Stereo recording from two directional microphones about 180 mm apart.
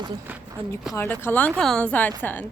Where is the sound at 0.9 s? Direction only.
15° left (ahead or behind).